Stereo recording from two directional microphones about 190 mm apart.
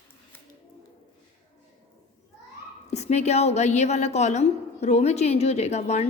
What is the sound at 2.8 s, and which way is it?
A woman's voice, 35° left (ahead or behind).